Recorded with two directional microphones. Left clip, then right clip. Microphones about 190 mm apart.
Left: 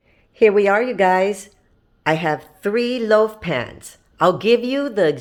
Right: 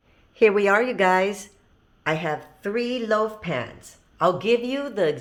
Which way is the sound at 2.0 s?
35° left (ahead or behind).